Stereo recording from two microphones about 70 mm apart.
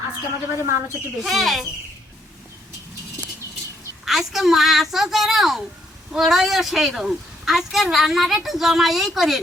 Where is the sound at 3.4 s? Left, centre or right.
Left.